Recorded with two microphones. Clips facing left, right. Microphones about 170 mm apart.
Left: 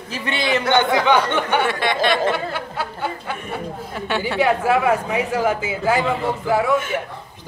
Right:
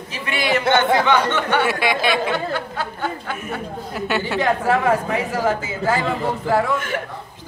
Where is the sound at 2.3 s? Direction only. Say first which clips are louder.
Right 1 dB; 5° left (ahead or behind).